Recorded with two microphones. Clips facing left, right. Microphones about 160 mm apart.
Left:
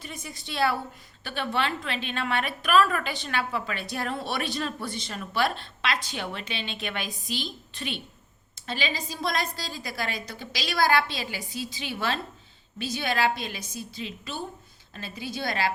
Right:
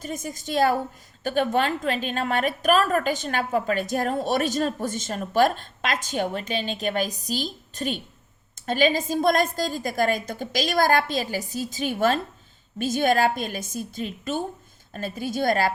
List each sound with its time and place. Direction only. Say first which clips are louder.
0.0 s a woman's voice: right 8 dB; 45° right (ahead or behind)